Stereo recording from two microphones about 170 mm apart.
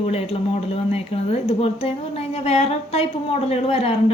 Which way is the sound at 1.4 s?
35° left (ahead or behind).